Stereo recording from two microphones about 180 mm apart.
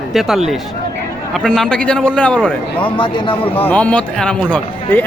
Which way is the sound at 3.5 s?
10° left (ahead or behind).